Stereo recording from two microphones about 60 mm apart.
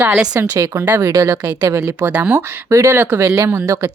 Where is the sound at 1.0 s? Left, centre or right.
Right.